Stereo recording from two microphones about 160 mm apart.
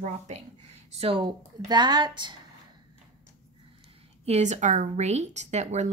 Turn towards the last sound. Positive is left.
turn(degrees=-45)  # may be behind; listen again after turning